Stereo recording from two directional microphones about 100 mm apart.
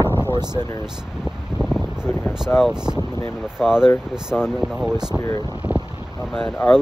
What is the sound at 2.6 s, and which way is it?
Speech, 5° right (ahead or behind).